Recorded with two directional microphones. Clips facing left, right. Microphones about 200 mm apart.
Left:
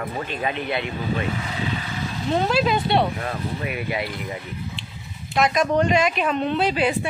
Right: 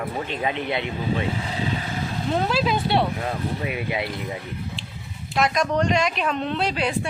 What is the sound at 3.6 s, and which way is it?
Speech, 20° right (ahead or behind).